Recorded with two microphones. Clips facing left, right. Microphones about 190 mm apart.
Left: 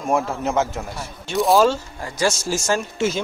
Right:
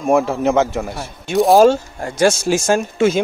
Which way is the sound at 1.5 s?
50° right (ahead or behind).